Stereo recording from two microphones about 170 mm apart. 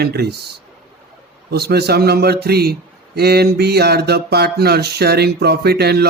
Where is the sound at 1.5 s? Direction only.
70° right (ahead or behind).